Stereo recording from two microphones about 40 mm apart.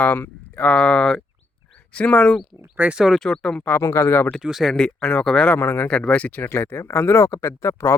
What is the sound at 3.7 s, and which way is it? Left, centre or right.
Speech, left.